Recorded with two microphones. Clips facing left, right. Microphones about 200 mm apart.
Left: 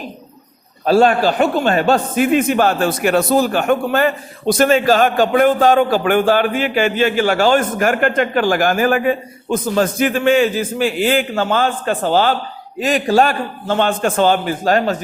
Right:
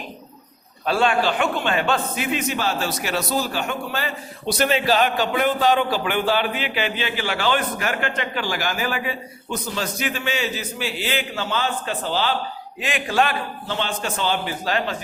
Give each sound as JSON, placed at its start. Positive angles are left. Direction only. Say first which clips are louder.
{"t": 0.9, "sound": "a man's voice", "louder": "left 7 dB", "side_deg": 40}